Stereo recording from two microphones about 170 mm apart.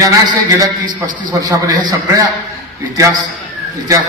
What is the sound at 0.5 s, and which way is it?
A man's voice, 20° right (ahead or behind).